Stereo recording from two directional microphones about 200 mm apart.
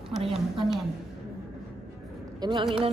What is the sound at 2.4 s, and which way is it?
Speech, 25° right (ahead or behind).